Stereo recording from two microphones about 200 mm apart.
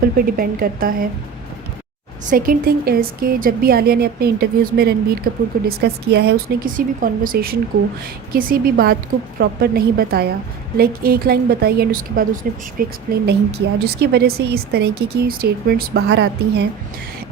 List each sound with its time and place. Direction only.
0.0 s speech: 45° right (ahead or behind)
2.3 s speech: 45° right (ahead or behind)